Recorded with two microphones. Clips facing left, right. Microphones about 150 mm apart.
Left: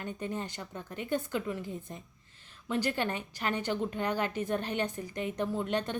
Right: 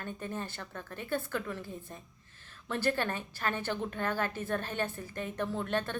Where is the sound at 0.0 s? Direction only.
15° left (ahead or behind).